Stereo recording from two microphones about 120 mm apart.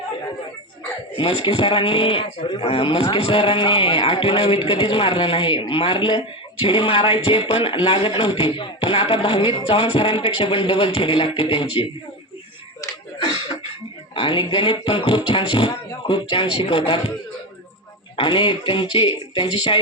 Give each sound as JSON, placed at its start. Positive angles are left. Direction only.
{"t": 1.1, "sound": "speech", "side_deg": 50}
{"t": 14.2, "sound": "speech", "side_deg": 45}
{"t": 18.2, "sound": "speech", "side_deg": 45}